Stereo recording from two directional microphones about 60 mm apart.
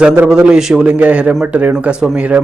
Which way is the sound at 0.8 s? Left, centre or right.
Right.